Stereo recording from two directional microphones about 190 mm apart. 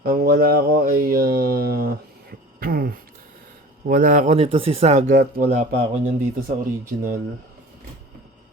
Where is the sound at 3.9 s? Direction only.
45° right (ahead or behind).